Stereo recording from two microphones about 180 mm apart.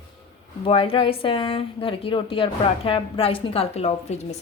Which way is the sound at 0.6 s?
30° left (ahead or behind).